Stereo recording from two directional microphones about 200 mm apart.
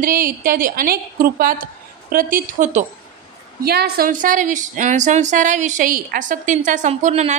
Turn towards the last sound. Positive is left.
turn(degrees=-35)  # may be behind; listen again after turning